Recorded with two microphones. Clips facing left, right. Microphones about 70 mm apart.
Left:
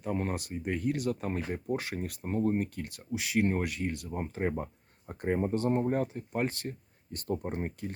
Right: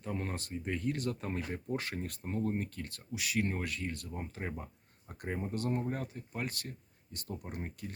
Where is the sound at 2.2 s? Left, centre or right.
Left.